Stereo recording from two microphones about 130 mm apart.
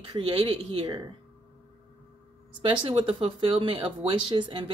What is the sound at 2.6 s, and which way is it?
Speech, 40° right (ahead or behind).